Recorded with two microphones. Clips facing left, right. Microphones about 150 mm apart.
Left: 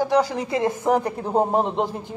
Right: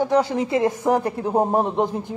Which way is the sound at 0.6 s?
10° right (ahead or behind).